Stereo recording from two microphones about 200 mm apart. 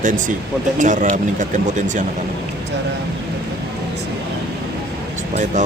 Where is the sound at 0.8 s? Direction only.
40° right (ahead or behind).